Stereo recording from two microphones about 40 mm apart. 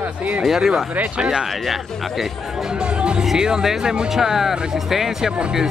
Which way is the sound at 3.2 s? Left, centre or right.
Centre.